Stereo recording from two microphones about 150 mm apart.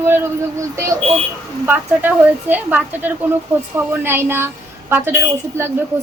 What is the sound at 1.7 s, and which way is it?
Speech, 10° right (ahead or behind).